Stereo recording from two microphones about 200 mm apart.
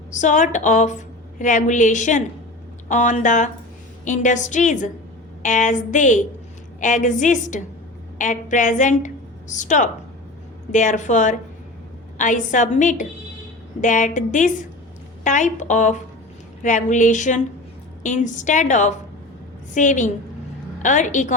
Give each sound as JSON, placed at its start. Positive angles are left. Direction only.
{"t": 0.2, "sound": "a woman's voice", "side_deg": 35}